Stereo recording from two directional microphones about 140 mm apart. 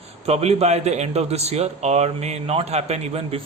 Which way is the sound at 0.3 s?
50° right (ahead or behind).